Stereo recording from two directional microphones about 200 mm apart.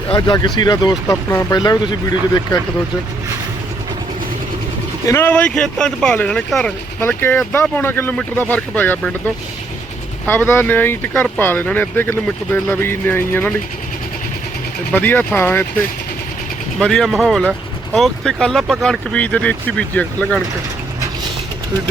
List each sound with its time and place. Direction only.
0.1 s speech: 20° left (ahead or behind)
5.0 s speech: 10° left (ahead or behind)
10.2 s speech: 10° left (ahead or behind)
14.9 s speech: 10° left (ahead or behind)
16.7 s speech: centre (ahead or behind)